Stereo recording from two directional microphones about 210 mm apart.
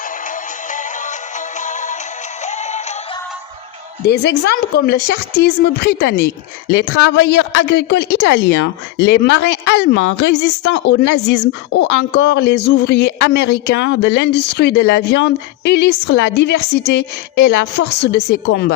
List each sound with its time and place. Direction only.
0.7 s music: 35° left (ahead or behind)
2.5 s synthetic singing: 35° left (ahead or behind)
4.0 s a woman's voice: 55° left (ahead or behind)